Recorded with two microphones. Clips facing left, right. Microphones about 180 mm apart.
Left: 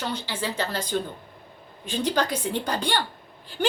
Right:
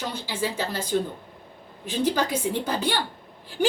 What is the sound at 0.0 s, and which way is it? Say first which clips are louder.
A woman's voice: right 1 dB; 10° right (ahead or behind).